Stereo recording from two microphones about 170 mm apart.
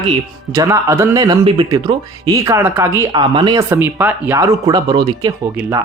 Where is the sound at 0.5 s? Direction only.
20° right (ahead or behind).